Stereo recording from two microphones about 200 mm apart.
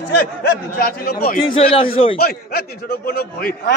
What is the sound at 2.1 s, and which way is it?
A man's voice, 50° left (ahead or behind).